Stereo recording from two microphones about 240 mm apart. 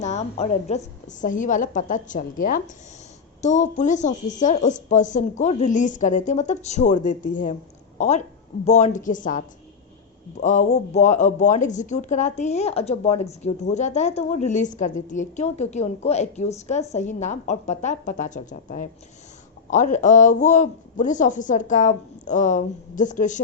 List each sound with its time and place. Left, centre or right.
0.0 s a woman's voice: left
10.4 s a woman's voice: left